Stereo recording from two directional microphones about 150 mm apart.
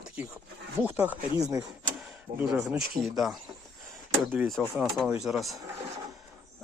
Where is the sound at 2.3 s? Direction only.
70° right (ahead or behind).